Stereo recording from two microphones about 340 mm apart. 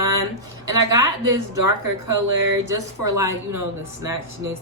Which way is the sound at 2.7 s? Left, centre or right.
Centre.